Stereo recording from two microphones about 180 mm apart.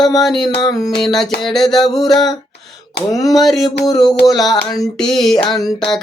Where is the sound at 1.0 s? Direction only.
Centre (ahead or behind).